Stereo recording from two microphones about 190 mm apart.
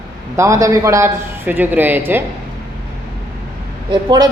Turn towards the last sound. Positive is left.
turn(degrees=-20)  # may be behind; listen again after turning